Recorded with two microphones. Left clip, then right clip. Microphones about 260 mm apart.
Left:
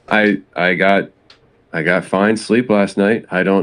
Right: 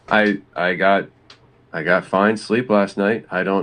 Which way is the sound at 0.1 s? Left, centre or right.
Left.